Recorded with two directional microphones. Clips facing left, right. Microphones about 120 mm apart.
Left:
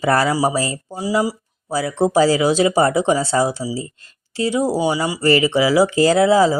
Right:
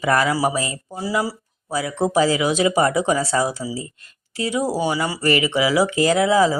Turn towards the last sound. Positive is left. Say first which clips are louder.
# left 3 dB
turn(degrees=30)  # may be behind; listen again after turning